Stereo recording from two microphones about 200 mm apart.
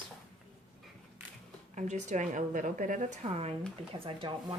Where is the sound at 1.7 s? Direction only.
35° right (ahead or behind).